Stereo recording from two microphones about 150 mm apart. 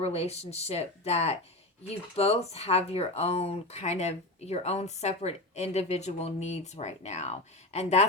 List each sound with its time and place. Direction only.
0.0 s speech: 45° left (ahead or behind)